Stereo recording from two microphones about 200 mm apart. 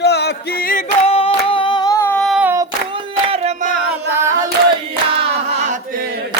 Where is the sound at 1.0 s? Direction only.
30° left (ahead or behind); by 2.5 s centre (ahead or behind).